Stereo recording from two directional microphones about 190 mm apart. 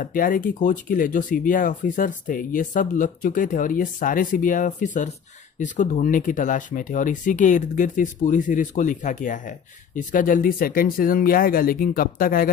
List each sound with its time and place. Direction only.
0.0 s speech: 45° left (ahead or behind)